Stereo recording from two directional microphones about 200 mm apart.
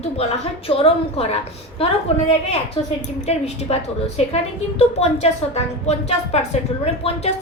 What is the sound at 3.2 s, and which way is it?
A woman's voice, 30° left (ahead or behind).